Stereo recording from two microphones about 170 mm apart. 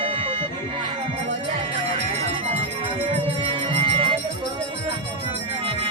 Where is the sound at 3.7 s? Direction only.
35° right (ahead or behind).